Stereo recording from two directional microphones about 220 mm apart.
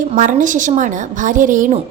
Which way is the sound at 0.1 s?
35° right (ahead or behind).